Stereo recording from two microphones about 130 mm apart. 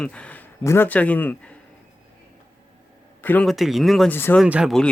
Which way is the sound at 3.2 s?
15° left (ahead or behind).